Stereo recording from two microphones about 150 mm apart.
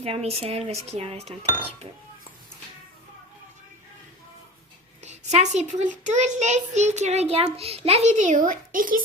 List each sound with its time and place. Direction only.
0.0 s a child's voice: 40° right (ahead or behind)
5.0 s a child's voice: 50° right (ahead or behind); by 9.0 s 65° right (ahead or behind)